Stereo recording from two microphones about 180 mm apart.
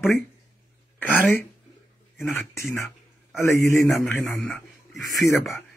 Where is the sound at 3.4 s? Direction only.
15° left (ahead or behind).